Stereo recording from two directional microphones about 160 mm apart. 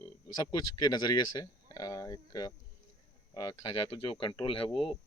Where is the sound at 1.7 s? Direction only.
25° left (ahead or behind).